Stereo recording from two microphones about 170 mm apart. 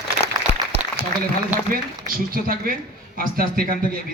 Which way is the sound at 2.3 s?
55° right (ahead or behind).